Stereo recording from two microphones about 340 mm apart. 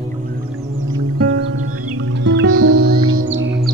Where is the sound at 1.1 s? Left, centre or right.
Right.